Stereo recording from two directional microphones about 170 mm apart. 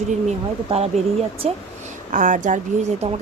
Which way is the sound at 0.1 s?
40° right (ahead or behind).